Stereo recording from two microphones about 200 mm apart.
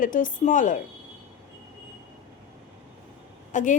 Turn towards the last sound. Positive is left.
turn(degrees=40)  # may be behind; listen again after turning